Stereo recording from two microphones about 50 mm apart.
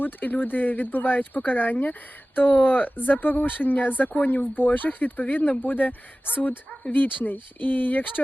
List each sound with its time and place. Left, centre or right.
0.0 s speech: left